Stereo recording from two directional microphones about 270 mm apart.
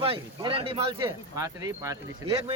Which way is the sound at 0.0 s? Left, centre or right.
Centre.